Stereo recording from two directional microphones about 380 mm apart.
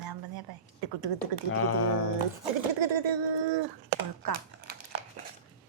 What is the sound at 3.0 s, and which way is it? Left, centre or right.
Speech, right.